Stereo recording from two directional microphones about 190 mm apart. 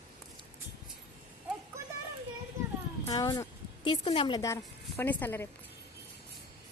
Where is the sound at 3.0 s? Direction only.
20° left (ahead or behind).